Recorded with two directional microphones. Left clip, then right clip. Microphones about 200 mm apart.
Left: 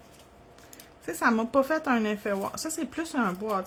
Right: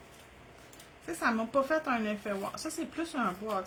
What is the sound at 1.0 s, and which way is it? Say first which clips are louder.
Speech: left 5 dB; 45° left (ahead or behind).